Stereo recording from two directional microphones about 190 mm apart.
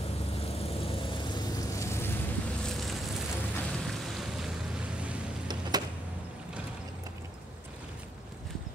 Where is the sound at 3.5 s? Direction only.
5° left (ahead or behind).